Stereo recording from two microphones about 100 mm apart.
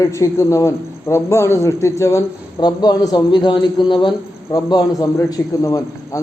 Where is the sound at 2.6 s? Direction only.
45° left (ahead or behind).